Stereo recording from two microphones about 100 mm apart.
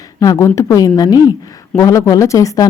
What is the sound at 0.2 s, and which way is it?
A woman's voice, 35° left (ahead or behind).